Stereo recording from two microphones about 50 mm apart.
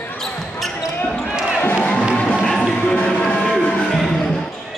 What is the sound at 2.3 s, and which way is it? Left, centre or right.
Music, centre.